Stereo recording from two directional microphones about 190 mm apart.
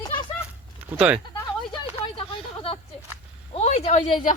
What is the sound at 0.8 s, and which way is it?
Sheep, 10° right (ahead or behind).